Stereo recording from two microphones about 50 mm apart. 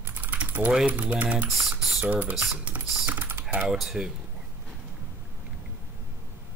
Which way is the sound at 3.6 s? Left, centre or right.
Centre.